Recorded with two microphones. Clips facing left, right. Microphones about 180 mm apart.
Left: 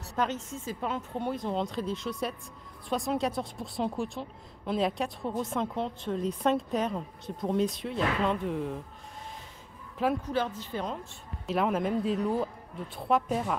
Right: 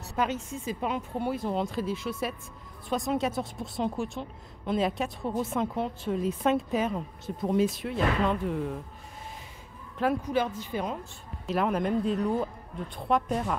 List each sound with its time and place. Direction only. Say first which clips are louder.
0.1 s a woman's voice: right 1 dB; 10° right (ahead or behind)
10.2 s speech: right 2 dB; 15° right (ahead or behind)
11.1 s a woman's voice: right 1 dB; centre (ahead or behind)